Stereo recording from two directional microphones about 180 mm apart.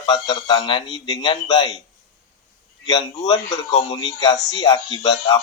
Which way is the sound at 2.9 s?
20° left (ahead or behind).